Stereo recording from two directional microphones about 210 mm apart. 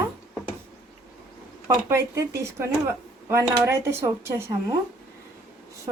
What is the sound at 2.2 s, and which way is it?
Speech, 15° right (ahead or behind).